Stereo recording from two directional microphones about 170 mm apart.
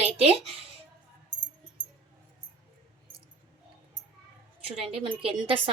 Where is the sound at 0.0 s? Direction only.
35° right (ahead or behind).